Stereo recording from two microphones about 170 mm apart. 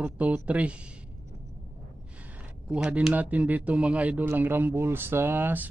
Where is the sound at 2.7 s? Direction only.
5° right (ahead or behind).